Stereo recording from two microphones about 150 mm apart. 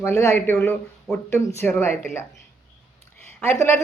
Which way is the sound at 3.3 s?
15° left (ahead or behind).